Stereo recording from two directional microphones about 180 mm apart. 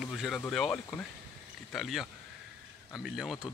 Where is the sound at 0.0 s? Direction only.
Centre (ahead or behind).